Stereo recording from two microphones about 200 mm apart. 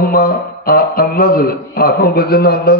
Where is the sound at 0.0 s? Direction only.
50° left (ahead or behind).